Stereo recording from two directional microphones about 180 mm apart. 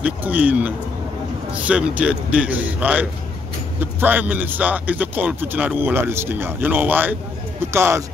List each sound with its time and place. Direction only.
0.0 s speech: 10° right (ahead or behind)